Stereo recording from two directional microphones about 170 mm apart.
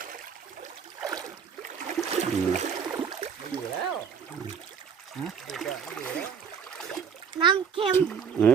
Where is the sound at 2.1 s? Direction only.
40° right (ahead or behind).